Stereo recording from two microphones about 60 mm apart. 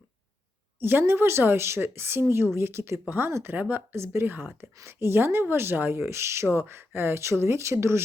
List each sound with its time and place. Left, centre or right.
0.8 s speech: right
3.5 s speech: right